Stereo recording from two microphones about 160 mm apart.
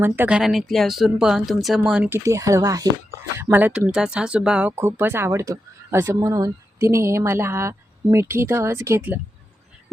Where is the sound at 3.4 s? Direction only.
10° right (ahead or behind).